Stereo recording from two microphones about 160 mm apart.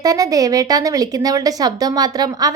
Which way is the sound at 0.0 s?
20° right (ahead or behind).